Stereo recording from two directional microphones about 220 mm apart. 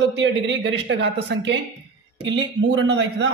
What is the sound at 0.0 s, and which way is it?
A man's voice, 55° right (ahead or behind).